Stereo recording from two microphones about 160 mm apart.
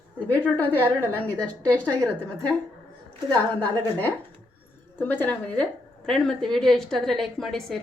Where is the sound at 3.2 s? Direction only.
10° left (ahead or behind).